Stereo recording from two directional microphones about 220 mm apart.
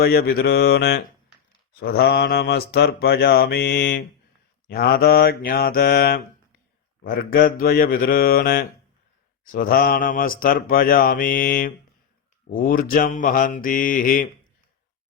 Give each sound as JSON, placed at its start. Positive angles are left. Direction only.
{"t": 0.0, "sound": "mantra", "side_deg": 45}
{"t": 9.4, "sound": "speech", "side_deg": 40}